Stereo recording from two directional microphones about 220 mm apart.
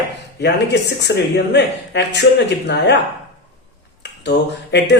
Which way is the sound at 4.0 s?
50° left (ahead or behind).